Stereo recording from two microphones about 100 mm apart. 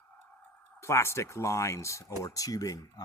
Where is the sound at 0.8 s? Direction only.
25° left (ahead or behind).